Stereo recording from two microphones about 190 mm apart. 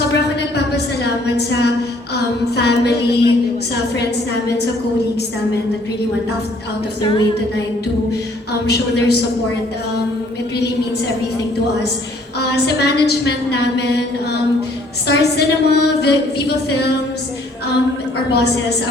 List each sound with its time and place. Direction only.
1.0 s a woman's voice: 60° left (ahead or behind)
8.6 s a woman's voice: 60° left (ahead or behind)
12.4 s a woman's voice: 60° left (ahead or behind)
15.0 s a woman's voice: 60° left (ahead or behind)
18.3 s a woman's voice: 60° left (ahead or behind)